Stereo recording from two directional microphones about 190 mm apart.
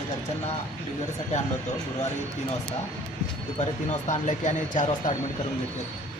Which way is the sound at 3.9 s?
40° left (ahead or behind).